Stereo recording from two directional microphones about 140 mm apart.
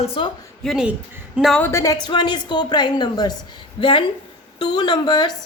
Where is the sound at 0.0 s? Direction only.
40° left (ahead or behind).